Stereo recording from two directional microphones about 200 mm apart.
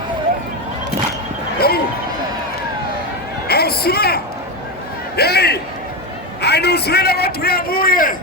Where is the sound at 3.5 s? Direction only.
50° left (ahead or behind).